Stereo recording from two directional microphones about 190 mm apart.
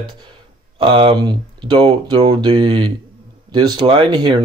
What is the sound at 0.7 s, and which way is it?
Speech, 25° right (ahead or behind).